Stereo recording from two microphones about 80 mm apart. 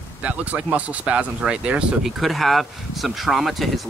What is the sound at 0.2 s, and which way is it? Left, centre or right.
Speech, centre.